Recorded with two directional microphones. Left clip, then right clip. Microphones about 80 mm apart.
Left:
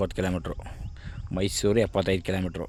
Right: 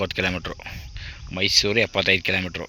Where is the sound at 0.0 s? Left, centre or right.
Left.